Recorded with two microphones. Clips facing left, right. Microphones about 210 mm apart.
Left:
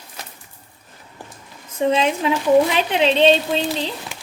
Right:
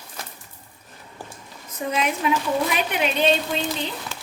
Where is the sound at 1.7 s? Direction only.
25° left (ahead or behind).